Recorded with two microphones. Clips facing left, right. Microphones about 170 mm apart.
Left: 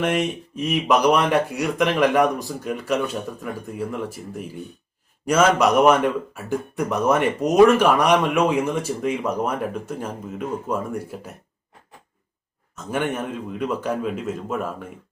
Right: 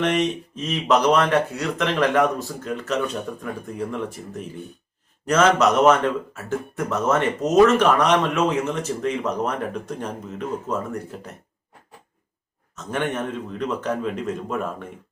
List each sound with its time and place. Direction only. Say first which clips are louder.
0.0 s a man's voice: right 1 dB; 5° left (ahead or behind)
12.7 s a man's voice: left 1 dB; 10° left (ahead or behind)